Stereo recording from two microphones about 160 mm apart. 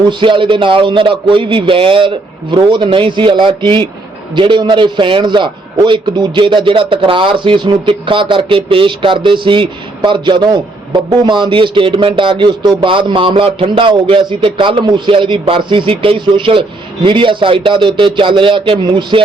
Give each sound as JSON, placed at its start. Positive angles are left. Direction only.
{"t": 0.0, "sound": "a man's voice", "side_deg": -30}